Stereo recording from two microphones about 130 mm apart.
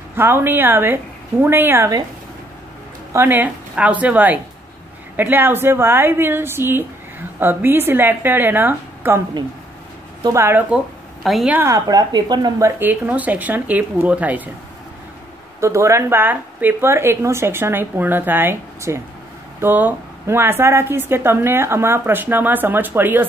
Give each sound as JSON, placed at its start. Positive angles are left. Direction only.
{"t": 0.1, "sound": "a woman's voice", "side_deg": -15}
{"t": 3.1, "sound": "a woman's voice", "side_deg": -15}
{"t": 10.2, "sound": "speech", "side_deg": -20}
{"t": 11.2, "sound": "a woman's voice", "side_deg": 0}
{"t": 11.5, "sound": "a woman's voice", "side_deg": -25}
{"t": 15.6, "sound": "a woman's voice", "side_deg": -20}